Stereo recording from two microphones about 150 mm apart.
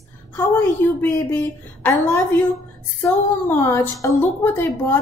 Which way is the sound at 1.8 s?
15° left (ahead or behind).